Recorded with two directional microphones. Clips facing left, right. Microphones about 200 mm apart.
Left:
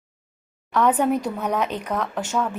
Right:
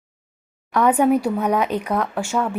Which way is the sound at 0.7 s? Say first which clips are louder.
Right 3 dB; 10° right (ahead or behind).